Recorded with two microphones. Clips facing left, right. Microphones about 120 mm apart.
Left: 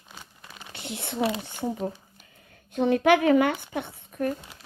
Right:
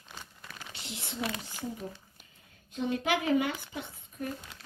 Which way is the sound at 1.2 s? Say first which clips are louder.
Left 9 dB; 25° left (ahead or behind).